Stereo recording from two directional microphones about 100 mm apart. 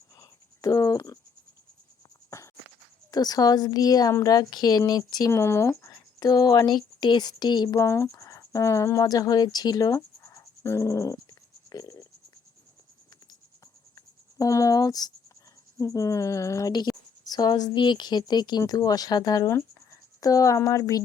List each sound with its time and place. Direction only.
0.2 s a sound: 35° left (ahead or behind)
3.1 s speech: 40° left (ahead or behind)
5.3 s speech: 25° left (ahead or behind); by 7.8 s 45° left (ahead or behind)
7.8 s speech: 30° left (ahead or behind)
13.9 s writing: 35° left (ahead or behind)
15.8 s a woman's voice: 35° left (ahead or behind)